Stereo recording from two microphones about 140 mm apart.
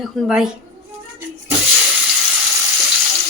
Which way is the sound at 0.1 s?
Centre (ahead or behind).